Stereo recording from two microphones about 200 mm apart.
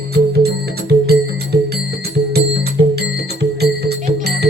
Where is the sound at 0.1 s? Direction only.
55° right (ahead or behind).